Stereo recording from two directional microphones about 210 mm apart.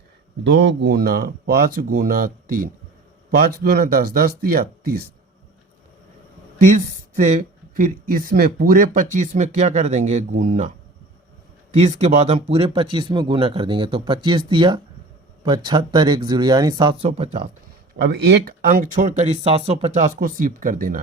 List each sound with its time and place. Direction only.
0.4 s speech: 60° right (ahead or behind)
6.6 s speech: 35° right (ahead or behind)
11.8 s speech: 30° right (ahead or behind)
17.9 s speech: 50° right (ahead or behind)